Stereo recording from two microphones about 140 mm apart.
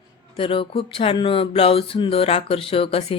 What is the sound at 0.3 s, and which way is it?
Speech, 40° left (ahead or behind).